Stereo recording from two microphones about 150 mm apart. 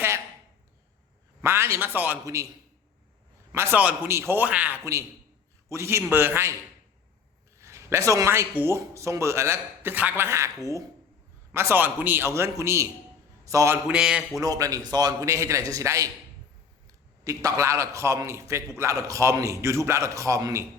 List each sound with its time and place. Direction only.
1.4 s a man's voice: 15° right (ahead or behind)
3.5 s a man's voice: 15° right (ahead or behind)
7.6 s a man's voice: 20° right (ahead or behind)
11.5 s a man's voice: 15° right (ahead or behind)
13.8 s speech: 5° right (ahead or behind)
14.4 s a man's voice: 25° right (ahead or behind)